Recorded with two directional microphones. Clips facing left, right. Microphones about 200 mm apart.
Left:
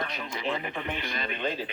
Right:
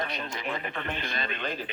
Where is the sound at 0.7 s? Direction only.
10° left (ahead or behind).